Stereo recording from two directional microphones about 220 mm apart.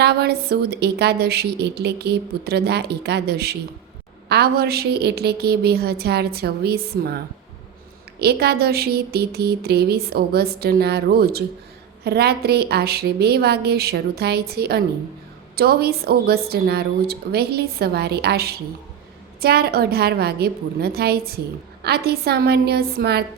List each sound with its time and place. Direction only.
0.0 s a woman's voice: 45° right (ahead or behind)
8.2 s a woman's voice: 45° right (ahead or behind)